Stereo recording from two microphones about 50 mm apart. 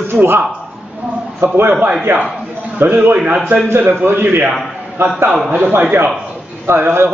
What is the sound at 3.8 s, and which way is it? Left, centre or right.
A man's voice, right.